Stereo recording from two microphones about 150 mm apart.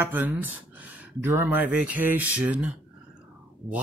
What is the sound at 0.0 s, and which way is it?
Speech, 15° right (ahead or behind).